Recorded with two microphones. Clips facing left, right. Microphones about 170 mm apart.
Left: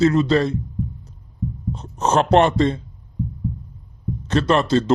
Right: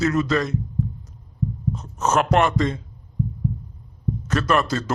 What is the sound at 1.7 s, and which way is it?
Speech, 30° left (ahead or behind).